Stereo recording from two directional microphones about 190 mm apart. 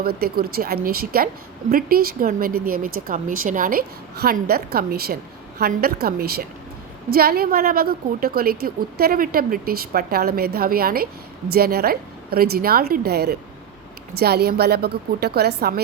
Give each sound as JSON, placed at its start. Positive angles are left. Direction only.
{"t": 0.0, "sound": "a woman's voice", "side_deg": -55}